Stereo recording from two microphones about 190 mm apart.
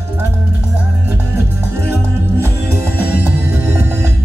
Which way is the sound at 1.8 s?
15° right (ahead or behind).